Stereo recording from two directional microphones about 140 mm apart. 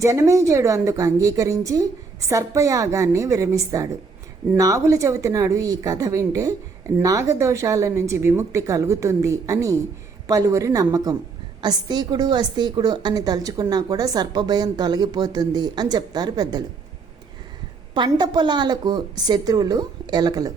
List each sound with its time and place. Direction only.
0.0 s speech: 20° right (ahead or behind)
17.9 s a woman's voice: 30° right (ahead or behind)